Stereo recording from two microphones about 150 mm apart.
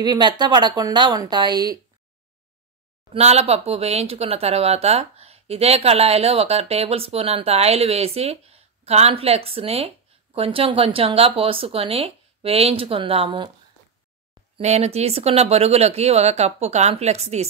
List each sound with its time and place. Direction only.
0.0 s speech: 30° right (ahead or behind)
3.1 s speech: 45° right (ahead or behind)
14.6 s speech: 45° right (ahead or behind)